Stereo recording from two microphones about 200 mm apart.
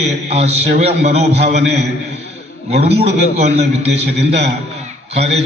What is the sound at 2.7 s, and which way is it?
Speech, 30° right (ahead or behind).